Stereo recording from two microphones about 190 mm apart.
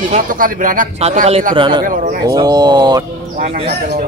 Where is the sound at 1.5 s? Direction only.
25° right (ahead or behind).